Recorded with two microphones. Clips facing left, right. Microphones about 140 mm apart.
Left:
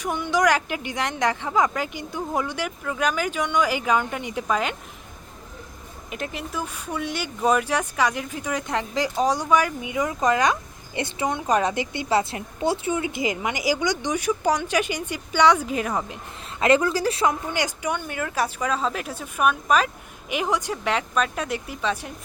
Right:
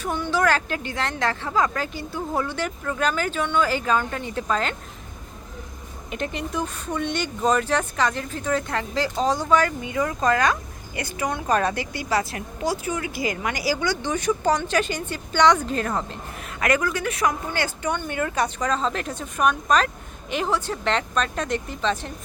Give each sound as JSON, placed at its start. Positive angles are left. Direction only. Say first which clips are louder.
{"t": 0.0, "sound": "speech", "louder": "left 1 dB", "side_deg": 15}
{"t": 6.1, "sound": "speech", "louder": "right 3 dB", "side_deg": 5}
{"t": 16.6, "sound": "a woman's voice", "louder": "left 4 dB", "side_deg": 25}
{"t": 17.5, "sound": "speech", "louder": "even", "side_deg": 15}